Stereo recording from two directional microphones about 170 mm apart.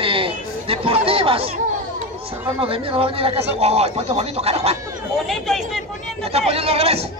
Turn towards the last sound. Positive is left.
turn(degrees=-35)  # may be behind; listen again after turning